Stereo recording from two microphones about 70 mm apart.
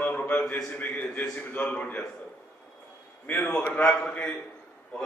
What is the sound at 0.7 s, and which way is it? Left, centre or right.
Mantra, left.